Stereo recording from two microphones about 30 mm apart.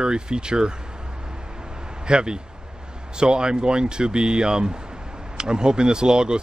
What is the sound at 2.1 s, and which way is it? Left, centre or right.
Speech, right.